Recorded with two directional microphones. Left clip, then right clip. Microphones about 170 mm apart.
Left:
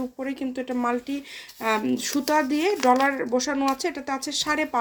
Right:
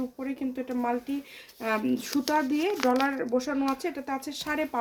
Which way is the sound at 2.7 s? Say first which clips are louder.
Left 7 dB; centre (ahead or behind).